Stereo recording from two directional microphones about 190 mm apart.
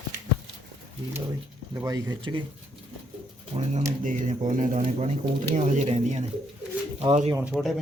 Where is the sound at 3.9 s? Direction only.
40° right (ahead or behind).